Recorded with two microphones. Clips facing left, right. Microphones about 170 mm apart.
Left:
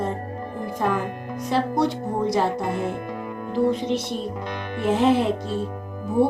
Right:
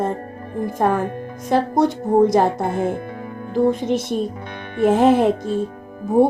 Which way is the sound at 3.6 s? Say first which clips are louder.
Right 4 dB; 50° right (ahead or behind).